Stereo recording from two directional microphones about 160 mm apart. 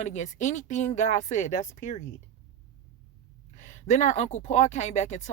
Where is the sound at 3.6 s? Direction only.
50° left (ahead or behind).